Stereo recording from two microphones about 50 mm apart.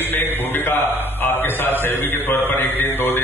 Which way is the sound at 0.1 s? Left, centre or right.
Left.